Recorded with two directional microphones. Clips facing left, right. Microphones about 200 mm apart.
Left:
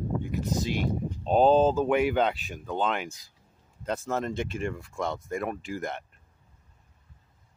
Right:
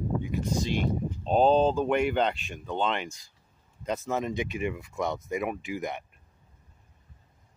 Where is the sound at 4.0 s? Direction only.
15° right (ahead or behind).